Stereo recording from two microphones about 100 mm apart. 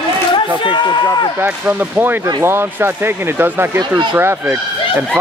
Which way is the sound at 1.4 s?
15° right (ahead or behind).